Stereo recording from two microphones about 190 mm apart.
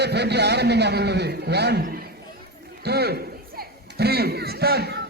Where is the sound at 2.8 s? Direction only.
60° right (ahead or behind).